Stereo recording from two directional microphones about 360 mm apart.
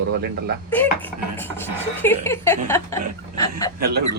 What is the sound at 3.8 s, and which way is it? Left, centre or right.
Speech, right.